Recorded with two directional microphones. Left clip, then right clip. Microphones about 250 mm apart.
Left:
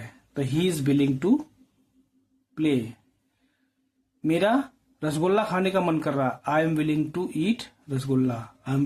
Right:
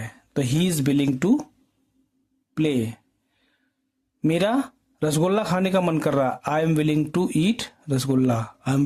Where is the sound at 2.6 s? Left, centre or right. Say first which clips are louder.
Right 2 dB; right.